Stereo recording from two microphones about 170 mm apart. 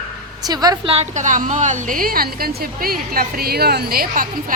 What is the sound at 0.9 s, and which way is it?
A woman's voice, 45° right (ahead or behind).